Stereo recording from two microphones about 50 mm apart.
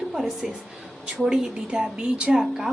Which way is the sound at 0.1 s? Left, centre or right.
Centre.